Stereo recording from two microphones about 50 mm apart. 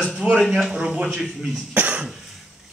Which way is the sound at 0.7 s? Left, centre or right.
Right.